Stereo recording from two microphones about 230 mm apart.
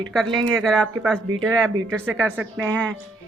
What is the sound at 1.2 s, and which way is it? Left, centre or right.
Speech, right.